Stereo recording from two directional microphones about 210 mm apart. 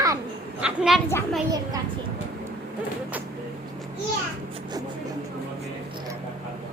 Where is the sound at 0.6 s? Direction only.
5° right (ahead or behind).